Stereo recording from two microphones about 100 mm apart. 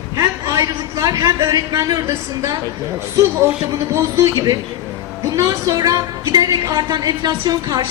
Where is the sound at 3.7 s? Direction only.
30° right (ahead or behind).